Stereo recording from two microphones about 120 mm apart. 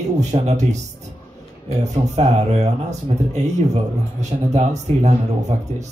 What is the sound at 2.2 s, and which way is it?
Speech, 65° right (ahead or behind).